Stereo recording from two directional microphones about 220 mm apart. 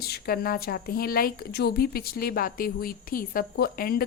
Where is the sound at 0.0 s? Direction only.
45° left (ahead or behind).